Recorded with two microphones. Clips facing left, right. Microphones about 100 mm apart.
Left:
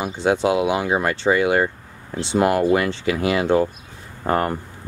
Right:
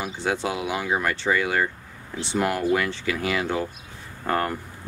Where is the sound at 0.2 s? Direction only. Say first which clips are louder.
Left 9 dB; 20° left (ahead or behind).